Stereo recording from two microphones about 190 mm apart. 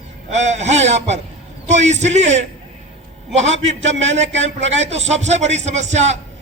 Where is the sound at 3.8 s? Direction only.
75° right (ahead or behind).